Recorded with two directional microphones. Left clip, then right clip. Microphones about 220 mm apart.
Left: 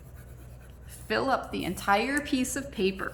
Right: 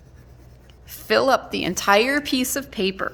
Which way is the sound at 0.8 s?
50° right (ahead or behind).